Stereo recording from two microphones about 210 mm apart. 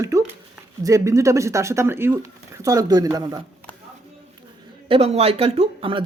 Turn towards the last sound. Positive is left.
turn(degrees=-25)  # may be behind; listen again after turning